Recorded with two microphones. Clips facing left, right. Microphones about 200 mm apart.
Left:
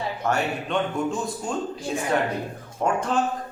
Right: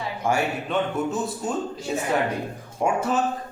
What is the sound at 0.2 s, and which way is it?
A man's voice, 10° right (ahead or behind).